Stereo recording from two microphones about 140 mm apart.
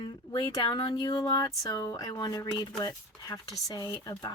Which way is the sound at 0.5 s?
30° left (ahead or behind).